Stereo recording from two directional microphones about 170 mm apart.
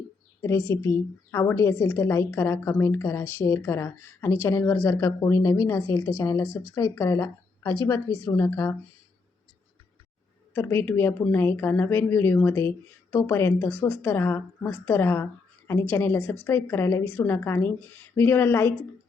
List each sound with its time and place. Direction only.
0.7 s a woman's voice: 15° left (ahead or behind)
10.5 s speech: 15° left (ahead or behind)